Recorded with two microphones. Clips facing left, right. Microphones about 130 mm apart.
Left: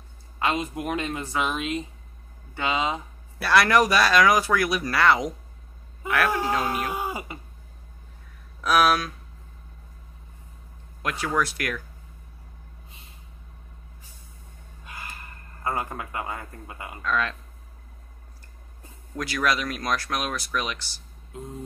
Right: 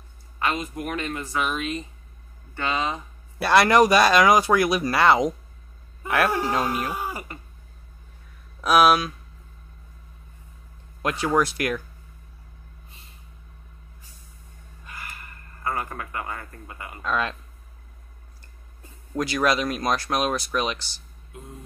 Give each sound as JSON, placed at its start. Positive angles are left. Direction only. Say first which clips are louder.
{"t": 0.4, "sound": "speech", "louder": "left 1 dB", "side_deg": 20}
{"t": 3.3, "sound": "speech", "louder": "right 3 dB", "side_deg": -25}
{"t": 6.9, "sound": "speech", "louder": "left 1 dB", "side_deg": 20}
{"t": 8.5, "sound": "speech", "louder": "right 3 dB", "side_deg": -20}
{"t": 11.0, "sound": "speech", "louder": "right 4 dB", "side_deg": -25}
{"t": 15.6, "sound": "speech", "louder": "even", "side_deg": 20}
{"t": 17.0, "sound": "speech", "louder": "right 1 dB", "side_deg": -20}
{"t": 19.1, "sound": "speech", "louder": "right 3 dB", "side_deg": -25}